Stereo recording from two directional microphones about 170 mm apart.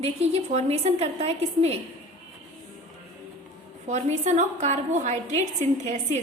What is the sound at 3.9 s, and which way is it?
A woman's voice, 45° right (ahead or behind).